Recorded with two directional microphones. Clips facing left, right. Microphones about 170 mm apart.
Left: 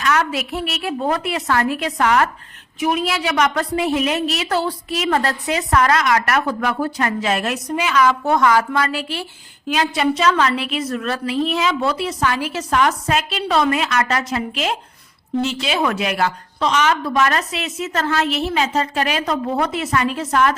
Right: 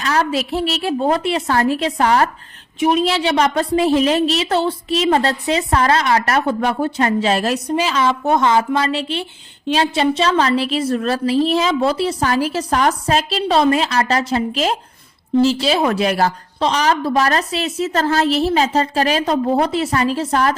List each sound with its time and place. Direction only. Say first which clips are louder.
0.0 s a woman's voice: right 1 dB; 30° right (ahead or behind)